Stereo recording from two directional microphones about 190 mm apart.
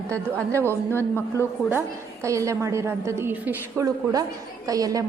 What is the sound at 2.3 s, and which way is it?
A woman's voice, 15° right (ahead or behind).